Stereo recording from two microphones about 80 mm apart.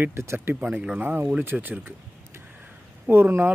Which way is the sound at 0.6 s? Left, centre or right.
Centre.